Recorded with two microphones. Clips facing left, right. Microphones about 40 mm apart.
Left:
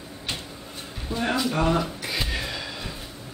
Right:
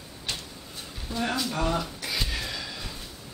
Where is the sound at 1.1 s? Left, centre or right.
Centre.